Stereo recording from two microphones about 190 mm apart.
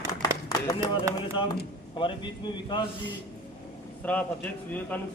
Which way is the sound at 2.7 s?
25° left (ahead or behind).